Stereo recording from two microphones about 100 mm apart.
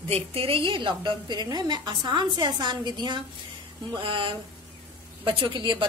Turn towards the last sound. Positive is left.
turn(degrees=-50)  # may be behind; listen again after turning